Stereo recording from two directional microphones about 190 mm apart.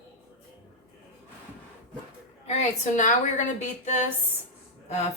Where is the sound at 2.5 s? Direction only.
40° left (ahead or behind).